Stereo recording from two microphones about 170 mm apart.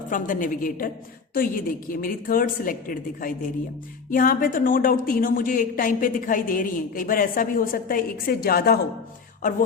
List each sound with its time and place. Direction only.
0.1 s a woman's voice: 50° left (ahead or behind)